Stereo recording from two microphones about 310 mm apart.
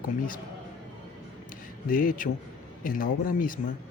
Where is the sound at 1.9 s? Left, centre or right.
Left.